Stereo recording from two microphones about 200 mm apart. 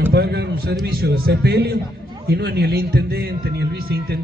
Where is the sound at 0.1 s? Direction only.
55° right (ahead or behind).